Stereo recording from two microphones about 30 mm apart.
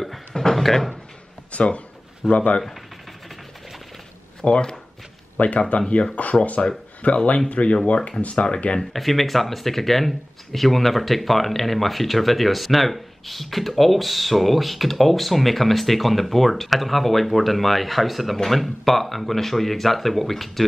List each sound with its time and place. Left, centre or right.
0.3 s a sound: centre
0.6 s speech: centre
1.5 s speech: left
2.2 s speech: centre
4.5 s speech: left
5.4 s speech: left
5.8 s speech: left
8.9 s speech: centre